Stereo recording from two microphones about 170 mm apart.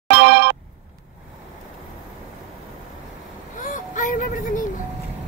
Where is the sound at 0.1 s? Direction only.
70° right (ahead or behind).